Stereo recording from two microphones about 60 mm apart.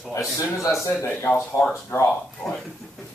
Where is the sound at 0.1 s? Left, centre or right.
Left.